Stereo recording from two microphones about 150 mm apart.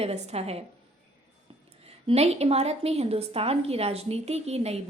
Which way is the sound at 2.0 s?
45° right (ahead or behind).